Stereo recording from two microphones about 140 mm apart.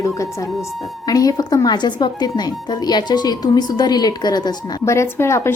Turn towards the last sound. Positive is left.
turn(degrees=20)  # may be behind; listen again after turning